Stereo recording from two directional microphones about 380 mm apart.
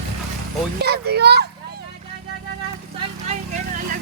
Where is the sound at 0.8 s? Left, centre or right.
Right.